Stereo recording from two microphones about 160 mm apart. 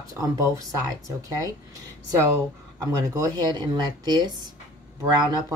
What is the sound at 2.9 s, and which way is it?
A woman's voice, 20° right (ahead or behind).